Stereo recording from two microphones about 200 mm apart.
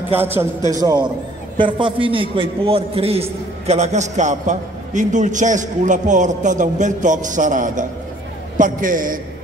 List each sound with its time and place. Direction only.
0.1 s a man's voice: 10° right (ahead or behind); by 9.2 s 40° right (ahead or behind)